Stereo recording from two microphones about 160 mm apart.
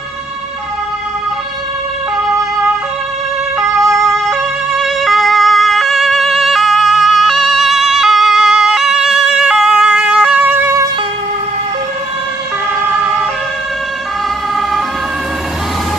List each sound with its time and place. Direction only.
2.1 s ambulance: centre (ahead or behind)
4.3 s emergency vehicle: centre (ahead or behind)